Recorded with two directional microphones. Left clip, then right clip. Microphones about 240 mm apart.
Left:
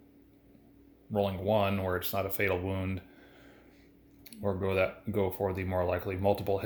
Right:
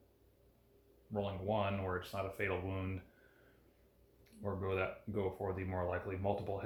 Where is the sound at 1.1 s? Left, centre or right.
Left.